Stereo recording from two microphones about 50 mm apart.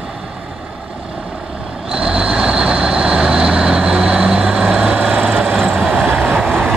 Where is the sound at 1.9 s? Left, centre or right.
Centre.